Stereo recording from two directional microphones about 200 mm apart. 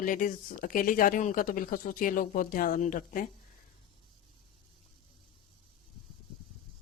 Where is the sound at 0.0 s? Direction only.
40° left (ahead or behind).